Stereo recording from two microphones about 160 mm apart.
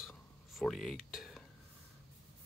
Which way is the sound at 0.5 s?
Centre (ahead or behind).